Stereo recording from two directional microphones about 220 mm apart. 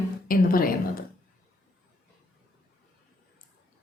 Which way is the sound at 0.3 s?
40° left (ahead or behind).